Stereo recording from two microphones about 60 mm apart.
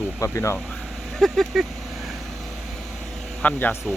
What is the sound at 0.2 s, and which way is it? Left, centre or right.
Speech, left.